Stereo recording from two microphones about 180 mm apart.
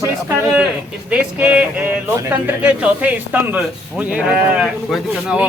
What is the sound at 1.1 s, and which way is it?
A man's voice, 10° right (ahead or behind).